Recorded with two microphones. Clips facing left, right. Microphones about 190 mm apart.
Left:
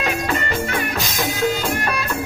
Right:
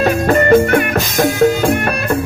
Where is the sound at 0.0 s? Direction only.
50° right (ahead or behind).